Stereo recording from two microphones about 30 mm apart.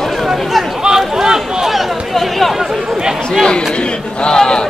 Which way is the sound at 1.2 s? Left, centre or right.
Centre.